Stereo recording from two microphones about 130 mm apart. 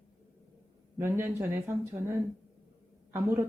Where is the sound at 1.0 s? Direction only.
20° right (ahead or behind).